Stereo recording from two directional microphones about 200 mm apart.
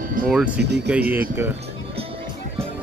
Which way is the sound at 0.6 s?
60° right (ahead or behind).